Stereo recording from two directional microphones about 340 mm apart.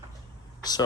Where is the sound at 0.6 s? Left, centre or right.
Centre.